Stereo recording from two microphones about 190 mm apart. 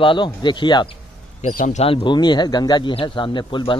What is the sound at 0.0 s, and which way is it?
Speech, 25° left (ahead or behind).